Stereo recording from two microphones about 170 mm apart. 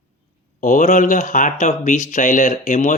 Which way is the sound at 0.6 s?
45° left (ahead or behind).